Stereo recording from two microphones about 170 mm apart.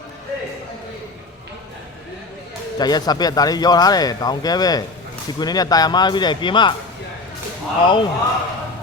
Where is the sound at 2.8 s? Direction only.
25° left (ahead or behind).